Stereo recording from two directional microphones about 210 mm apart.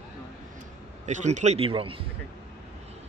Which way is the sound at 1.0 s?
35° right (ahead or behind).